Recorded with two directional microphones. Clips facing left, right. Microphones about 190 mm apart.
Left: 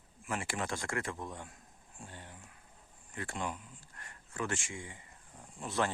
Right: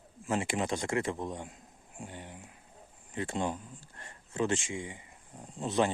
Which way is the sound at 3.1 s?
20° right (ahead or behind).